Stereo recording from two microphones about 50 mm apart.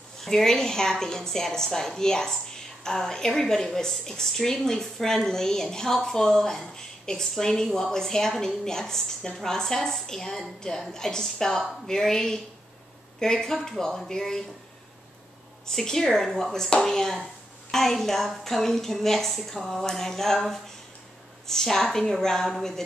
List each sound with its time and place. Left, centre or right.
0.2 s a woman's voice: centre
15.6 s a woman's voice: centre